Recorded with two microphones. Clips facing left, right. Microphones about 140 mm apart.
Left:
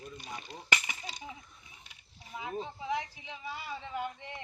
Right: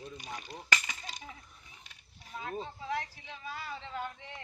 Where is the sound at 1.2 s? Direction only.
5° left (ahead or behind).